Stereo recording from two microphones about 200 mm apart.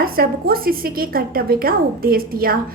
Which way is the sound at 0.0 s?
50° right (ahead or behind).